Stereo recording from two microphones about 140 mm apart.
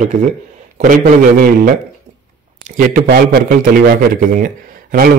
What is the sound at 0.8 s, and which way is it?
Speech, 75° right (ahead or behind).